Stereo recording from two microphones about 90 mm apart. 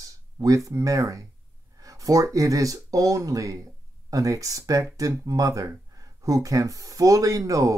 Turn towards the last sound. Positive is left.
turn(degrees=-40)  # may be behind; listen again after turning